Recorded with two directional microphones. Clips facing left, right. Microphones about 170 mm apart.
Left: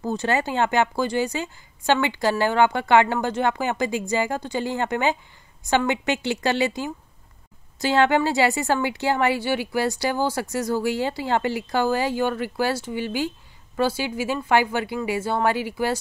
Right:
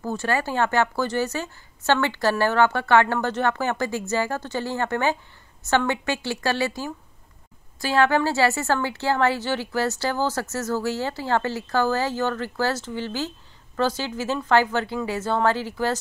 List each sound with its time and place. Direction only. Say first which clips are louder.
0.0 s a woman's voice: left 2 dB; 20° left (ahead or behind)